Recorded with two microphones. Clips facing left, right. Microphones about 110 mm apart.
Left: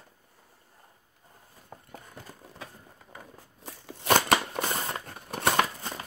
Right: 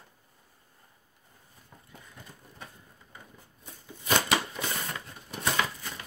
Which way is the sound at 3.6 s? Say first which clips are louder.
Left 8 dB; 85° left.